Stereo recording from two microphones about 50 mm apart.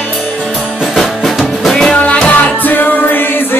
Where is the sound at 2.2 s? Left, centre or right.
Left.